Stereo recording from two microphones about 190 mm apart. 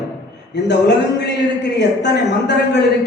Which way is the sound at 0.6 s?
65° left (ahead or behind).